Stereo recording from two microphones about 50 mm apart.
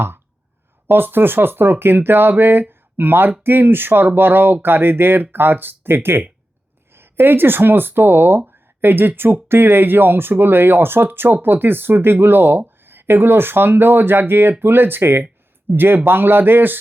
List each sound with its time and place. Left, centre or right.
0.9 s speech: right